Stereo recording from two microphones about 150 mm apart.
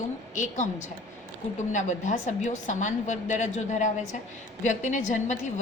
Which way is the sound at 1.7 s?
55° left (ahead or behind).